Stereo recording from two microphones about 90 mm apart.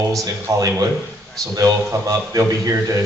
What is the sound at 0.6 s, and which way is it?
A man's voice, 35° right (ahead or behind).